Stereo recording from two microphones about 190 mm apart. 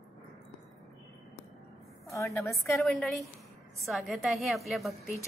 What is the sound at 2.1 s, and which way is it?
Speech, 15° left (ahead or behind).